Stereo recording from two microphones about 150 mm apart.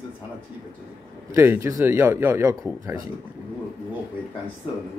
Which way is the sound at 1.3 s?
15° right (ahead or behind).